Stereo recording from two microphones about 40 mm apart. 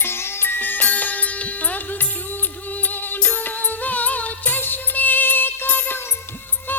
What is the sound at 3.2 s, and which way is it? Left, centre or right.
Music, left.